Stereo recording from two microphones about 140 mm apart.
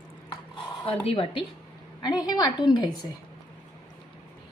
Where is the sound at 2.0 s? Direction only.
30° left (ahead or behind).